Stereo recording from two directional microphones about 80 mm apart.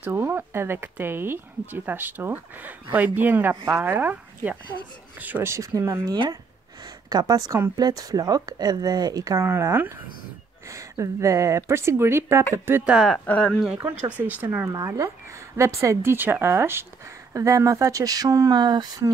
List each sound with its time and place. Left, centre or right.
0.0 s speech: right
5.5 s a woman's voice: right
9.4 s a woman's voice: right
13.1 s speech: centre
14.1 s speech: right
14.7 s speech: right
15.5 s a woman's voice: right
17.3 s speech: right